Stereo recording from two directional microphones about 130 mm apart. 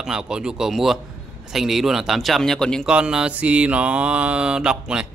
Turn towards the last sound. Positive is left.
turn(degrees=-5)  # may be behind; listen again after turning